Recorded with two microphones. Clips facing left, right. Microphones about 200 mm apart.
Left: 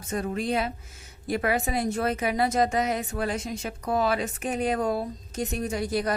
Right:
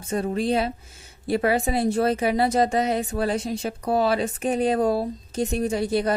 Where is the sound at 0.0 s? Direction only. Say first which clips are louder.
Right 4 dB; 30° right (ahead or behind).